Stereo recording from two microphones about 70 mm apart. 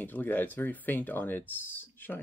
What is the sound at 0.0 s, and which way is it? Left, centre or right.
Speech, left.